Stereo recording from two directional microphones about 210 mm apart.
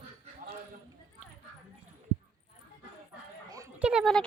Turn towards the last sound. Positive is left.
turn(degrees=0)  # may be behind; listen again after turning